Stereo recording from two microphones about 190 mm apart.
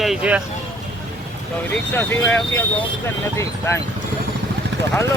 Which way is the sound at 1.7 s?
10° left (ahead or behind).